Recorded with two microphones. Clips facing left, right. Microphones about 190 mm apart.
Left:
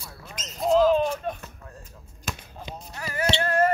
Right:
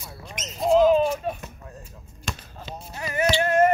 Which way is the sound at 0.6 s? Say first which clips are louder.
Right 2 dB; 5° right (ahead or behind).